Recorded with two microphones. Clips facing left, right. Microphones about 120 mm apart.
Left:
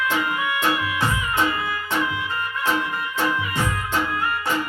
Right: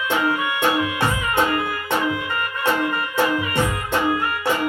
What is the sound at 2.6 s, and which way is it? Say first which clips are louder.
Music: right 4 dB; 65° right (ahead or behind).